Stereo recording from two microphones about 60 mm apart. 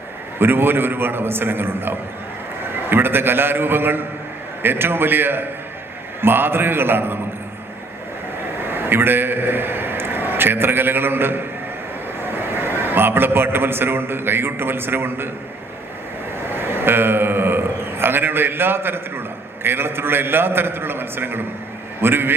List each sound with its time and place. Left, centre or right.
0.3 s a man's voice: right
8.7 s a man's voice: right
16.5 s a sound: right
19.6 s a man's voice: right